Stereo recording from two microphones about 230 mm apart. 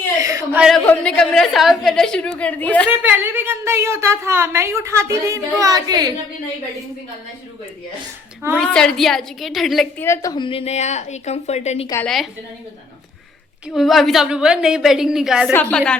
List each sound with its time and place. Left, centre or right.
0.2 s a sound: centre
0.6 s a woman's voice: centre
3.0 s a woman's voice: centre
8.5 s a woman's voice: centre
10.1 s a woman's voice: centre
11.9 s a woman's voice: centre
13.7 s a woman's voice: centre